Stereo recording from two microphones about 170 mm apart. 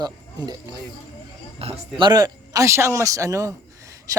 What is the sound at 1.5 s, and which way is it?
A man's voice, 30° right (ahead or behind).